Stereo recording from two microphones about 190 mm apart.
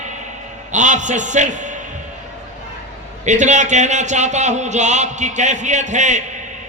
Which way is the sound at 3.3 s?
40° right (ahead or behind).